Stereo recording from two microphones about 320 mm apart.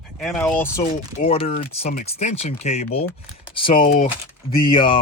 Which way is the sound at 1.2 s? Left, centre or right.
Centre.